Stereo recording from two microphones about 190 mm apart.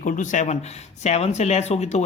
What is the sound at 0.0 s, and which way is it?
A man's voice, 40° left (ahead or behind).